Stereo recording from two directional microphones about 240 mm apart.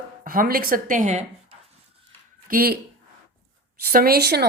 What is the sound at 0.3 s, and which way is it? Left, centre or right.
Speech, right.